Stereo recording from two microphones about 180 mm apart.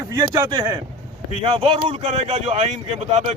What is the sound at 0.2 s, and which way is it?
Speech, 20° right (ahead or behind).